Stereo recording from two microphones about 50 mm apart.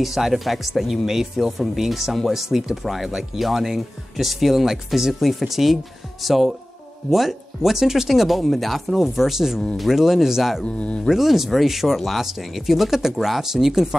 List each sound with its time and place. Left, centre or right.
0.0 s speech: centre
10.6 s speech: left
11.1 s speech: centre